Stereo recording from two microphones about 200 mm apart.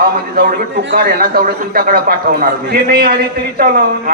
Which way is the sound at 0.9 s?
45° right (ahead or behind).